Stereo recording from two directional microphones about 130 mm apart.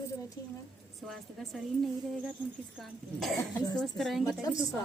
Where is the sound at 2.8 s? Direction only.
Centre (ahead or behind).